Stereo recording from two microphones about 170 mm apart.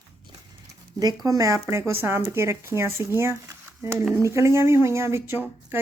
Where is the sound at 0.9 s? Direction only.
20° right (ahead or behind).